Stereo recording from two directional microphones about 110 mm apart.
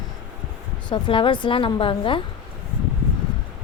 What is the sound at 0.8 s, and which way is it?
Speech, 50° left (ahead or behind).